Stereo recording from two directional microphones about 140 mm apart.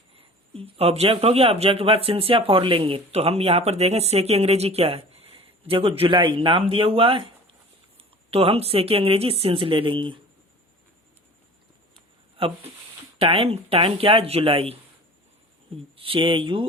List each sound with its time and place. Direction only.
0.5 s speech: 45° right (ahead or behind)
12.4 s speech: 40° right (ahead or behind)
16.0 s speech: 40° right (ahead or behind)